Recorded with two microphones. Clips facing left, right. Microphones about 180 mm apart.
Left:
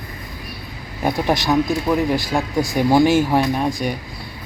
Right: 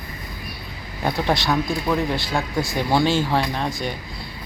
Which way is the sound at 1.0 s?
15° left (ahead or behind).